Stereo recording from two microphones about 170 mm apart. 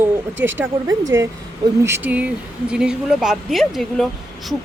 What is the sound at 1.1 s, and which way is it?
Speech, 90° right.